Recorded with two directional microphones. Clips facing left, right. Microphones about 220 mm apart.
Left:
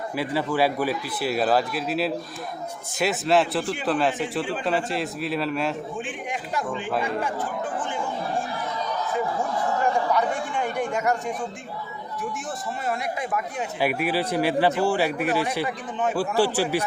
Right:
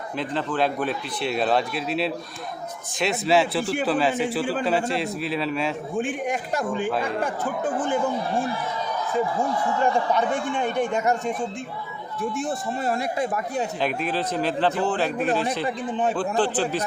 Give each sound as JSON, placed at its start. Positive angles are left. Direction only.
{"t": 0.2, "sound": "a man's voice", "side_deg": 10}
{"t": 6.0, "sound": "speech", "side_deg": -45}
{"t": 10.1, "sound": "speech", "side_deg": -25}
{"t": 12.4, "sound": "speech", "side_deg": -30}
{"t": 13.7, "sound": "speech", "side_deg": 10}
{"t": 15.6, "sound": "speech", "side_deg": -30}
{"t": 16.3, "sound": "speech", "side_deg": 10}